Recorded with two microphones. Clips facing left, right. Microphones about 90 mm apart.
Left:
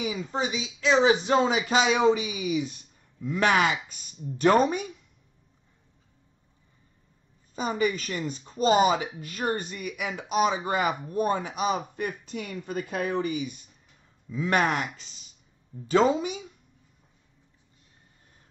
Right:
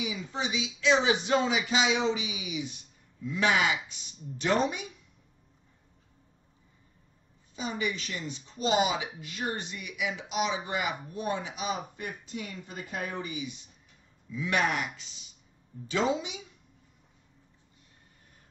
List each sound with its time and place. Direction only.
0.0 s speech: 45° left (ahead or behind)
7.5 s speech: 45° left (ahead or behind)